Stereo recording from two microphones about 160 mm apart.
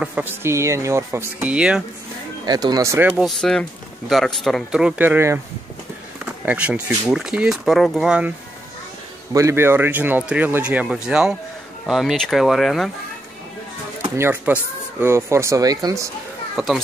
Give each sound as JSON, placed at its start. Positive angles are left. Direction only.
{"t": 0.0, "sound": "speech", "side_deg": -10}
{"t": 2.4, "sound": "speech", "side_deg": -25}
{"t": 3.2, "sound": "speech", "side_deg": 0}
{"t": 9.3, "sound": "speech", "side_deg": -20}
{"t": 14.1, "sound": "speech", "side_deg": -15}
{"t": 16.5, "sound": "a child's voice", "side_deg": 0}